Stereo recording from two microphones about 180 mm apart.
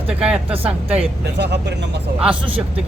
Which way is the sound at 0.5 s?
30° right (ahead or behind).